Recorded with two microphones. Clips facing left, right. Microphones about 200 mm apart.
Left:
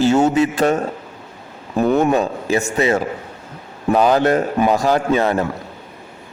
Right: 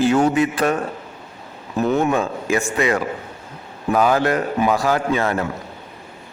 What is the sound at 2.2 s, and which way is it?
Speech, 20° left (ahead or behind).